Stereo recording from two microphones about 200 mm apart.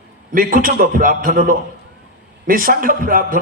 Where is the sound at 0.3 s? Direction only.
45° right (ahead or behind).